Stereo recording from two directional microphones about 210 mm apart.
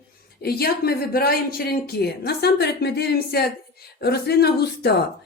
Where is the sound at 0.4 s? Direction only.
45° left (ahead or behind).